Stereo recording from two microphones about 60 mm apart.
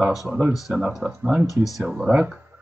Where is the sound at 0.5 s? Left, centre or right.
Centre.